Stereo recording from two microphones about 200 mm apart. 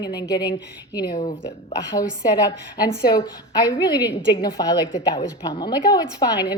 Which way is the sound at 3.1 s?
20° left (ahead or behind).